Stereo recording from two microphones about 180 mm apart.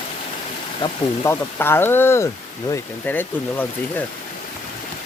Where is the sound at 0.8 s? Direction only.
15° left (ahead or behind).